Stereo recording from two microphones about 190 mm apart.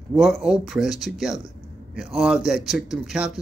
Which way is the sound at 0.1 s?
Centre (ahead or behind).